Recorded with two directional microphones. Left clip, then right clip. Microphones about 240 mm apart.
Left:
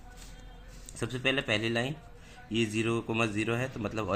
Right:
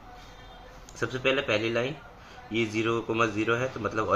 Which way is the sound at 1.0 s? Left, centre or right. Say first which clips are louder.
Right 4 dB; left.